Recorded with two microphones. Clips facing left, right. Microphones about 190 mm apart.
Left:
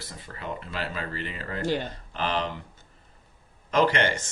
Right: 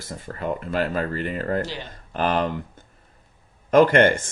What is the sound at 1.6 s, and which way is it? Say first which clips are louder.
Speech: left 3 dB; 50° left (ahead or behind).